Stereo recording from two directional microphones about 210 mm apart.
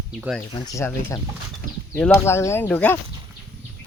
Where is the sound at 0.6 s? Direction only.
15° left (ahead or behind).